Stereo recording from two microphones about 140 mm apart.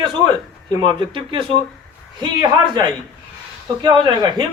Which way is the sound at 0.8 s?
35° right (ahead or behind).